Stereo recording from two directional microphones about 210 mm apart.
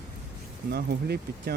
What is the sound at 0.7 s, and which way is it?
Speech, 50° right (ahead or behind).